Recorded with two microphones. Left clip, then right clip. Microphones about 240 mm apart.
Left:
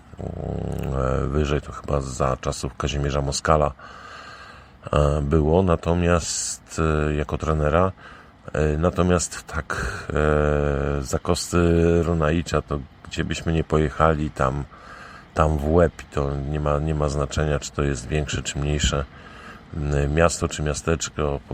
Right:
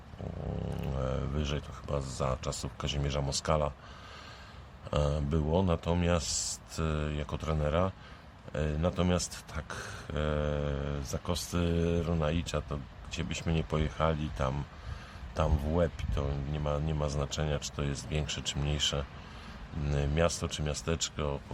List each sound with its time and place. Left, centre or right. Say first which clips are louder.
0.9 s speech: left 13 dB; left
4.9 s speech: left 11 dB; left